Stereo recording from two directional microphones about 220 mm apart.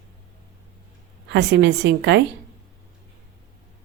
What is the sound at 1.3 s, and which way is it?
Speech, 50° right (ahead or behind).